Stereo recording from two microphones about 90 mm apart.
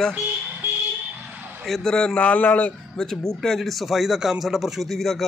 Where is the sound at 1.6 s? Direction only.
5° left (ahead or behind).